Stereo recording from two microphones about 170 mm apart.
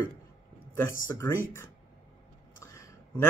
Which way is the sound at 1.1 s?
15° left (ahead or behind).